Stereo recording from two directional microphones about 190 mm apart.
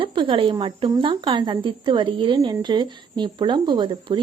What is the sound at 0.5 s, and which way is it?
Speech, 25° right (ahead or behind).